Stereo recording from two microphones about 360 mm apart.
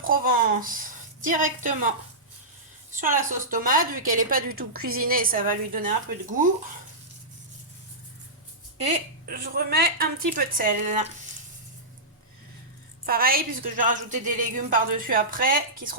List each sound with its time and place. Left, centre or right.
0.0 s a woman's voice: right
3.0 s a woman's voice: right
8.8 s a woman's voice: right
13.1 s a woman's voice: right